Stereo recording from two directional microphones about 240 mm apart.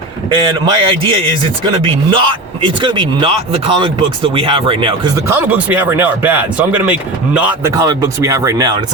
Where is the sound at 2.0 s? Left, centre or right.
Right.